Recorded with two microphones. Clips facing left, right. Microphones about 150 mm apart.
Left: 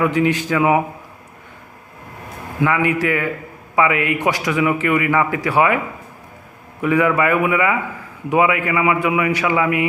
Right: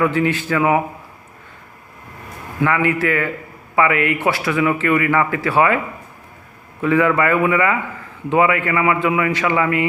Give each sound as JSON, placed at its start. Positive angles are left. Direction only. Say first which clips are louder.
{"t": 0.0, "sound": "a man's voice", "louder": "left 1 dB", "side_deg": 15}
{"t": 2.6, "sound": "a man's voice", "louder": "even", "side_deg": 15}
{"t": 6.8, "sound": "a man's voice", "louder": "even", "side_deg": 15}